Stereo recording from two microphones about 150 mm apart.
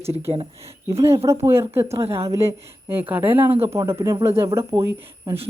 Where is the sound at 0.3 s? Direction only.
40° right (ahead or behind).